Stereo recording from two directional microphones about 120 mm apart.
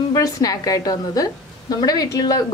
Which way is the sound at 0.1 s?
30° left (ahead or behind).